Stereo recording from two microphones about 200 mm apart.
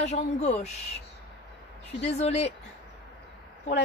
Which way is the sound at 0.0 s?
35° left (ahead or behind).